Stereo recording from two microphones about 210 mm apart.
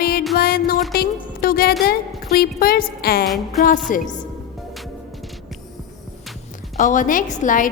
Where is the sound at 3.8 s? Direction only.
40° left (ahead or behind).